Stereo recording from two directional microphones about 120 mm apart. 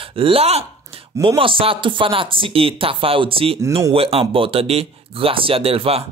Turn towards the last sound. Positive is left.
turn(degrees=-55)  # may be behind; listen again after turning